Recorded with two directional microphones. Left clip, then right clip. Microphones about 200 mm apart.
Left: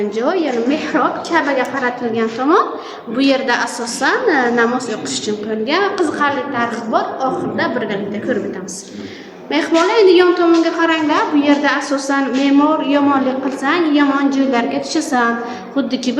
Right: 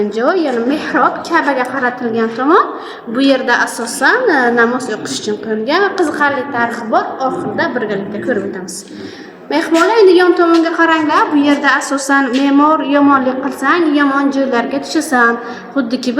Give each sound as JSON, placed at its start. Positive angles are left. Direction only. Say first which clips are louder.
{"t": 0.2, "sound": "a woman's voice", "louder": "right 3 dB", "side_deg": -25}
{"t": 9.5, "sound": "a woman's voice", "louder": "right 2 dB", "side_deg": -25}